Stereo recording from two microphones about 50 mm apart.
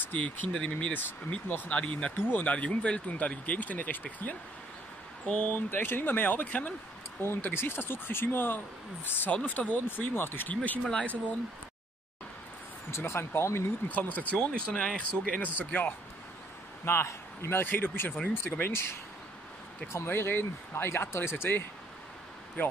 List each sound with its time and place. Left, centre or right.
0.0 s speech: left
0.5 s speech: centre
5.7 s speech: left
7.2 s speech: left
9.3 s speech: left
10.5 s speech: left
12.9 s speech: left
13.8 s speech: left
14.4 s speech: centre
15.4 s speech: left
16.8 s speech: left
20.1 s speech: left
22.6 s speech: left